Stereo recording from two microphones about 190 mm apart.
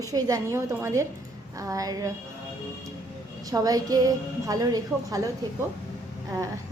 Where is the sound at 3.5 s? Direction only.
20° right (ahead or behind).